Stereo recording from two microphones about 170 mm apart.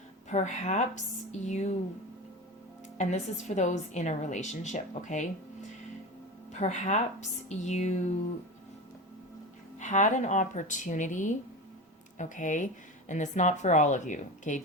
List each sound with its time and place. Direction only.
0.3 s a woman's voice: 45° left (ahead or behind)
3.0 s a woman's voice: 40° left (ahead or behind)
6.5 s a woman's voice: 45° left (ahead or behind)
9.7 s a woman's voice: 45° left (ahead or behind)